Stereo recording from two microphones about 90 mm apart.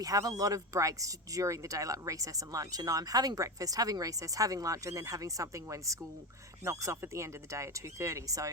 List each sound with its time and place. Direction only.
0.0 s speech: 40° right (ahead or behind)